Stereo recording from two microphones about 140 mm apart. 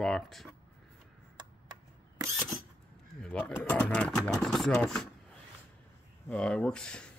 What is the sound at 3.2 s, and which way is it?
Speech, 5° left (ahead or behind).